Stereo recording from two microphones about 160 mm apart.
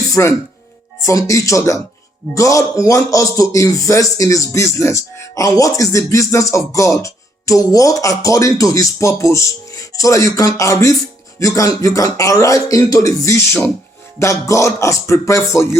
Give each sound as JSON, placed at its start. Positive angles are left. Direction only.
{"t": 0.1, "sound": "a man's voice", "side_deg": 20}